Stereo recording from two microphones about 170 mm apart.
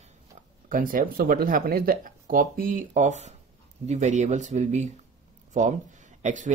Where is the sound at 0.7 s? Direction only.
55° right (ahead or behind).